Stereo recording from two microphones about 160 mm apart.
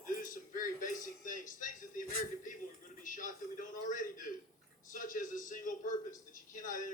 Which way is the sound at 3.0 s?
55° left (ahead or behind).